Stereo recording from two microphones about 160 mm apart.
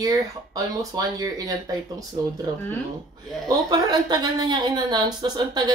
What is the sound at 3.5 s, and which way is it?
Speech, 25° right (ahead or behind).